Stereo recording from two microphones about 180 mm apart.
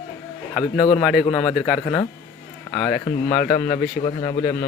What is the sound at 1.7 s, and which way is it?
A man's voice, 20° left (ahead or behind).